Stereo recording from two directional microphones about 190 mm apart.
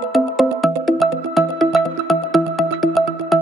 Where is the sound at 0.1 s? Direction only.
Centre (ahead or behind).